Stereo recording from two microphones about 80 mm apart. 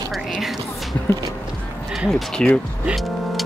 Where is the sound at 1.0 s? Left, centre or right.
Left.